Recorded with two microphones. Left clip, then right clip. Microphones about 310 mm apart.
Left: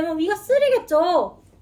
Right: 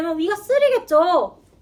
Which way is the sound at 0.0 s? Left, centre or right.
Centre.